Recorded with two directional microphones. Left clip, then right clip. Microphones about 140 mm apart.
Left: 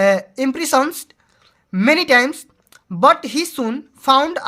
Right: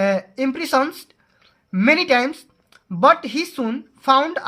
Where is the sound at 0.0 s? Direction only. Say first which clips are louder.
Left 4 dB; 30° left (ahead or behind).